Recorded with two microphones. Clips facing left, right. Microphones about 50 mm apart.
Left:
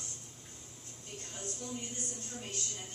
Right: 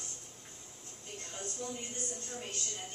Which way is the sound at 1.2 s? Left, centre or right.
Right.